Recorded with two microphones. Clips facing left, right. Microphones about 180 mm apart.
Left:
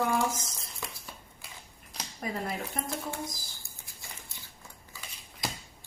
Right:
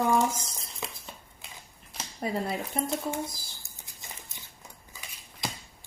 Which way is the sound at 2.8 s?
20° right (ahead or behind).